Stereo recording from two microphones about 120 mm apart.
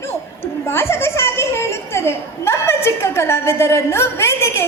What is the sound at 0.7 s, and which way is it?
Children playing, 20° left (ahead or behind).